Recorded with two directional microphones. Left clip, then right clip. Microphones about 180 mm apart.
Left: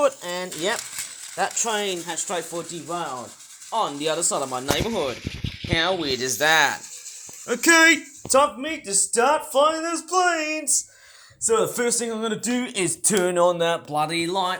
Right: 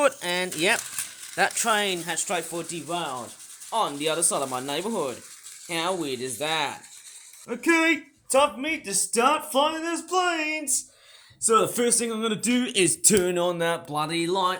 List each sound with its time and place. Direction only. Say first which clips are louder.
0.0 s speech: left 1 dB; 35° right (ahead or behind); by 3.1 s 15° right (ahead or behind)
3.7 s speech: left 1 dB; 5° right (ahead or behind)